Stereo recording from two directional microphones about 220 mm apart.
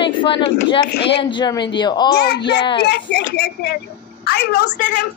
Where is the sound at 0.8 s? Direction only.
45° left (ahead or behind).